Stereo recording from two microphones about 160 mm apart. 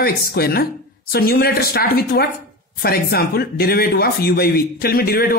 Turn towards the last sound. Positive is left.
turn(degrees=70)  # may be behind; listen again after turning